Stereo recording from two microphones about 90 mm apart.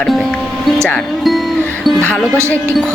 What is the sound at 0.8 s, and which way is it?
Speech, 5° left (ahead or behind).